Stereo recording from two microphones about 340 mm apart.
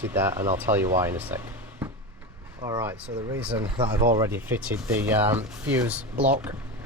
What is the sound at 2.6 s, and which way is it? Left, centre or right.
Speech, centre.